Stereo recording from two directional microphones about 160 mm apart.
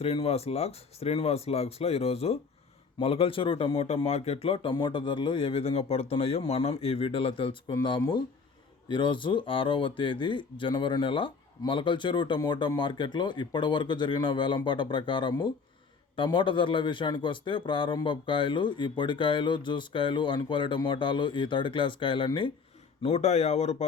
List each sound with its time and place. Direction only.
0.0 s speech: 40° left (ahead or behind)
23.0 s speech: 40° left (ahead or behind)